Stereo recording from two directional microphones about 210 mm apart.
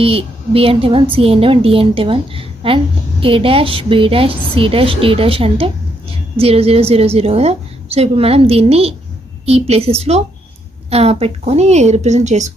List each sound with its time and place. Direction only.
0.0 s a woman's voice: 25° right (ahead or behind)